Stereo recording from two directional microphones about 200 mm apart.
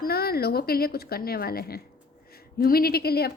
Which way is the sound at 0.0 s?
50° left (ahead or behind).